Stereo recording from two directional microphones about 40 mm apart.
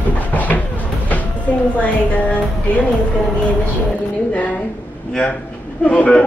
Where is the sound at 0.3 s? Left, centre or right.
Left.